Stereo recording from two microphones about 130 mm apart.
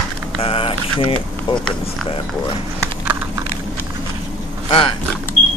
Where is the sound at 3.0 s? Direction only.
15° right (ahead or behind).